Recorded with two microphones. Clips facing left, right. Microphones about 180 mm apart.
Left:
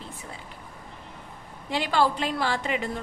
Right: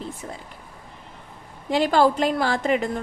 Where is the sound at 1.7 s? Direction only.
45° right (ahead or behind).